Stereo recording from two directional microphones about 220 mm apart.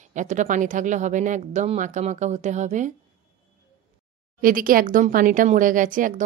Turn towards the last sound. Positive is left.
turn(degrees=-35)  # may be behind; listen again after turning